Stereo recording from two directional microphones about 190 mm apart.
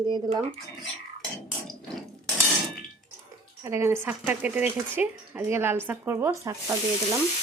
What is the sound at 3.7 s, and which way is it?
Speech, 15° right (ahead or behind).